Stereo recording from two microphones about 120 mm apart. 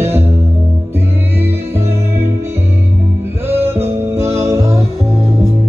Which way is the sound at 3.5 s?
20° right (ahead or behind).